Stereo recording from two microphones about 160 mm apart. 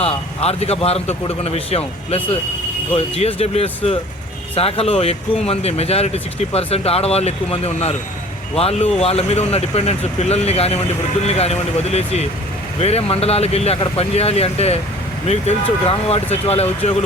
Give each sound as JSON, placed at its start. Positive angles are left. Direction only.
{"t": 0.0, "sound": "a man's voice", "side_deg": 40}